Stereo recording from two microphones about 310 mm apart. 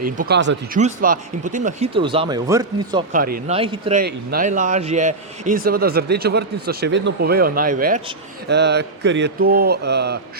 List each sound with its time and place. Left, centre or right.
0.0 s a man's voice: right; by 3.0 s centre
3.1 s a man's voice: right
4.0 s a man's voice: right